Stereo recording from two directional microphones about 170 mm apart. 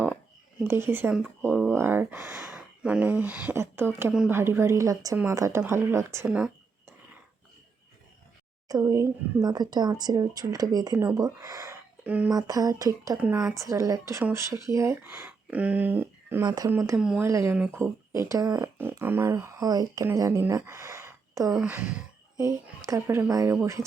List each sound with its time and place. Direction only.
0.6 s speech: 15° right (ahead or behind)
1.5 s speech: centre (ahead or behind)
1.7 s speech: 10° right (ahead or behind)
6.2 s speech: 5° right (ahead or behind)
8.6 s speech: 20° right (ahead or behind)
12.3 s speech: 20° right (ahead or behind)
16.4 s speech: 20° right (ahead or behind)
17.0 s speech: 5° right (ahead or behind)
17.2 s speech: 15° right (ahead or behind)
21.6 s speech: 10° right (ahead or behind)